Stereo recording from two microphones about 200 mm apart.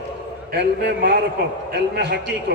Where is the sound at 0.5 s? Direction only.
55° right (ahead or behind).